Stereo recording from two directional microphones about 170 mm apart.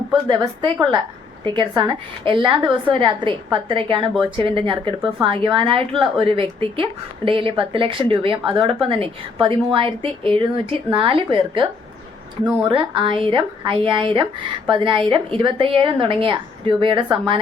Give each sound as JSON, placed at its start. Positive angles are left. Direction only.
{"t": 0.1, "sound": "a woman's voice", "side_deg": -25}